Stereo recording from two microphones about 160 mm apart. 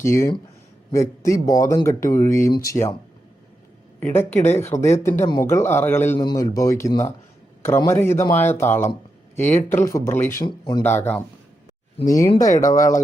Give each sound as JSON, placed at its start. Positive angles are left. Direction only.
{"t": 0.0, "sound": "speech", "side_deg": 20}
{"t": 4.0, "sound": "speech", "side_deg": 15}
{"t": 6.1, "sound": "speech", "side_deg": 25}
{"t": 10.4, "sound": "speech", "side_deg": 30}
{"t": 10.8, "sound": "speech", "side_deg": 15}